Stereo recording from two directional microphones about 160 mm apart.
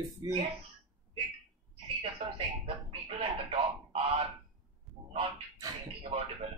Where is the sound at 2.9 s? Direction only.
35° right (ahead or behind).